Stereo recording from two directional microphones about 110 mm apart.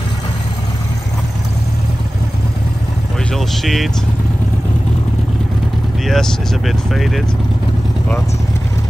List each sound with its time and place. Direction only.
3.3 s speech: centre (ahead or behind)
6.0 s speech: 5° left (ahead or behind)